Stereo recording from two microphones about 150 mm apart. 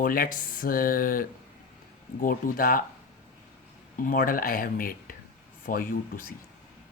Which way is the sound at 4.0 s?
70° left (ahead or behind).